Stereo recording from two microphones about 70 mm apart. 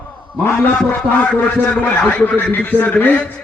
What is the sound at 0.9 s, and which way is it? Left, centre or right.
A man's voice, left.